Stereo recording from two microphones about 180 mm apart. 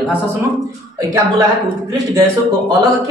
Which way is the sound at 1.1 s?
20° right (ahead or behind).